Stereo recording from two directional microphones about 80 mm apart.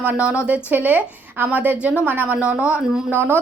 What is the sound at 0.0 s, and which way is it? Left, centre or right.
A woman's voice, right.